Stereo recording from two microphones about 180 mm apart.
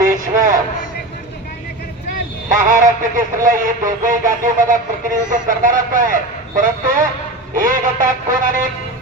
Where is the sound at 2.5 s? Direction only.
45° right (ahead or behind).